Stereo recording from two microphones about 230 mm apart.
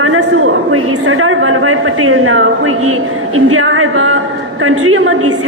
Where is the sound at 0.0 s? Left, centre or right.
Right.